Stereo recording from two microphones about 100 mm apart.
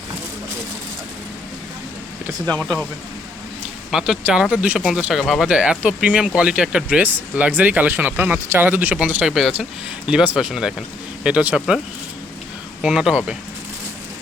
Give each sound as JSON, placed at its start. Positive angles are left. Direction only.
{"t": 2.5, "sound": "speech", "side_deg": 10}
{"t": 3.9, "sound": "speech", "side_deg": -5}
{"t": 9.3, "sound": "speech", "side_deg": -5}
{"t": 12.8, "sound": "speech", "side_deg": -10}